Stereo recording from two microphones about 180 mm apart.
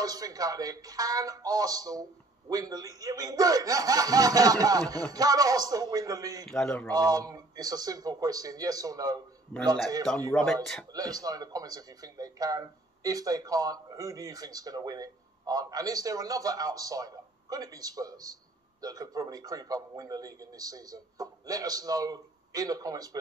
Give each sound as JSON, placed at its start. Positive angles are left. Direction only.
{"t": 0.0, "sound": "a man's voice", "side_deg": -20}
{"t": 6.5, "sound": "speech", "side_deg": 5}
{"t": 7.0, "sound": "a man's voice", "side_deg": -20}
{"t": 10.3, "sound": "speech", "side_deg": 0}
{"t": 10.9, "sound": "a man's voice", "side_deg": -20}